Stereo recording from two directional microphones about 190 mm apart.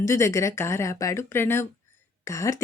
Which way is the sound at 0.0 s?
15° left (ahead or behind).